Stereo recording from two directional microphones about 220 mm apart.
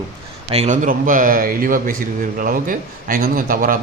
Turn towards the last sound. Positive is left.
turn(degrees=-40)  # may be behind; listen again after turning